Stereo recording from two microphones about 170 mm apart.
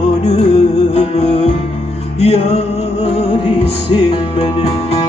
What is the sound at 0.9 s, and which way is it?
Music, 40° left (ahead or behind).